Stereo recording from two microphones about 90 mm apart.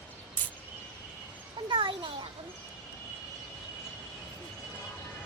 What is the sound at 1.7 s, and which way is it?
Speech, 65° right (ahead or behind).